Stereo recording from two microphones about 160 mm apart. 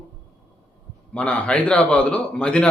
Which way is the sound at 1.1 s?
5° left (ahead or behind).